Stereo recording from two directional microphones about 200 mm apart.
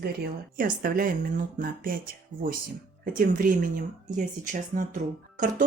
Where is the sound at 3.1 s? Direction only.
45° right (ahead or behind).